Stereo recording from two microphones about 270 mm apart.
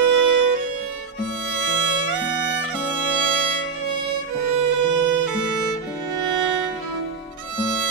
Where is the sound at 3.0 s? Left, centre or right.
Left.